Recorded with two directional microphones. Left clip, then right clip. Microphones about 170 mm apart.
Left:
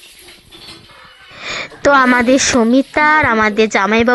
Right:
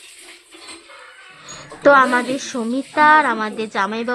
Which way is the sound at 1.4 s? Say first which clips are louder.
Left 1 dB; 25° left (ahead or behind).